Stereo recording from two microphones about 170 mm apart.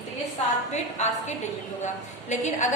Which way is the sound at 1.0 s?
40° left (ahead or behind).